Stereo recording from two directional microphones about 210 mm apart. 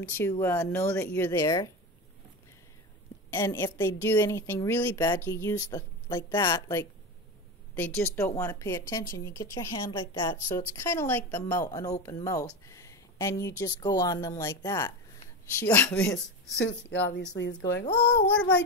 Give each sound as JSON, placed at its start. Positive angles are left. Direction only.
{"t": 0.0, "sound": "a woman's voice", "side_deg": 10}
{"t": 3.3, "sound": "a woman's voice", "side_deg": 10}
{"t": 16.5, "sound": "speech", "side_deg": 55}